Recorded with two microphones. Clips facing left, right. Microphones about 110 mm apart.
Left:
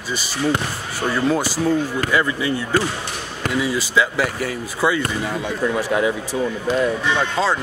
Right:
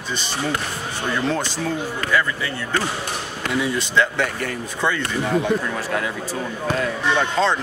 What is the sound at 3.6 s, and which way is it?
Speech, 5° left (ahead or behind).